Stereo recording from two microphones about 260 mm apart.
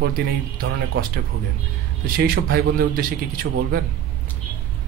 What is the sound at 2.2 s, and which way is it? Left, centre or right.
A man's voice, right.